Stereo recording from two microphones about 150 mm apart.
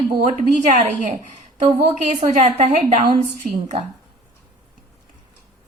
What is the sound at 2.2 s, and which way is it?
A woman's voice, 55° right (ahead or behind).